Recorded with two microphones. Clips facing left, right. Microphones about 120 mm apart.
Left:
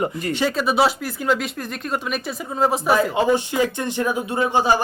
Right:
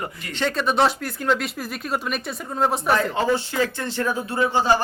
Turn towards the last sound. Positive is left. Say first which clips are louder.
# left 1 dB
turn(degrees=15)  # may be behind; listen again after turning